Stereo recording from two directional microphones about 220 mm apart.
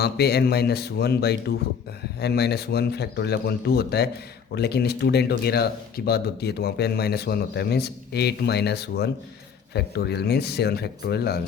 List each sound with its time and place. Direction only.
0.0 s speech: 45° left (ahead or behind)